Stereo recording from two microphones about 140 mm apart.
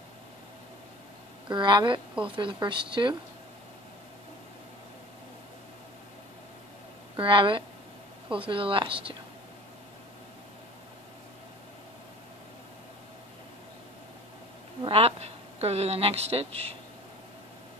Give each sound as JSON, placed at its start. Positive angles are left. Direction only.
{"t": 1.5, "sound": "speech", "side_deg": -35}
{"t": 7.2, "sound": "speech", "side_deg": -40}
{"t": 14.8, "sound": "a woman's voice", "side_deg": -45}